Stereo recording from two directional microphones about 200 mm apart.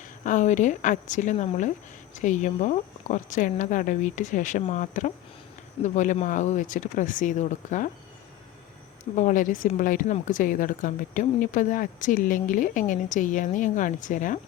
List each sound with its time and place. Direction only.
0.0 s speech: 40° left (ahead or behind)
9.1 s speech: 40° left (ahead or behind)